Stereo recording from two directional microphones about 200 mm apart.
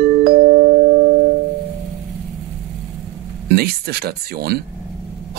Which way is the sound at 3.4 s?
50° right (ahead or behind).